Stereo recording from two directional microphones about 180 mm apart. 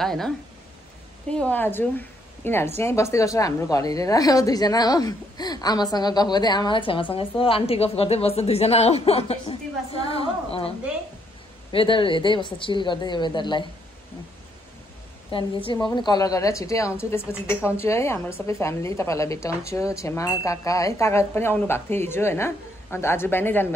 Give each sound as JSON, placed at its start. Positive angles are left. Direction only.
{"t": 0.0, "sound": "speech", "side_deg": 0}
{"t": 1.3, "sound": "a woman's voice", "side_deg": 5}
{"t": 11.7, "sound": "a woman's voice", "side_deg": 30}
{"t": 15.3, "sound": "a woman's voice", "side_deg": 25}